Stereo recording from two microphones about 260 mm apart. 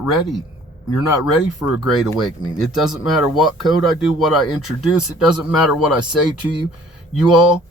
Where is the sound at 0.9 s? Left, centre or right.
Left.